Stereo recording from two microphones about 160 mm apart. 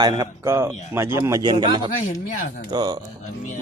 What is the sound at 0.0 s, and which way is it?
A man's voice, 25° right (ahead or behind).